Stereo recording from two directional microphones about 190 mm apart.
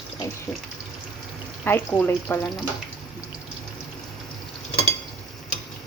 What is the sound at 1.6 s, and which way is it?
Speech, 10° left (ahead or behind).